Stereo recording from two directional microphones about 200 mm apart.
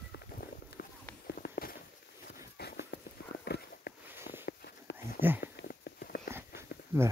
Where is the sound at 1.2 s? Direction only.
50° left (ahead or behind).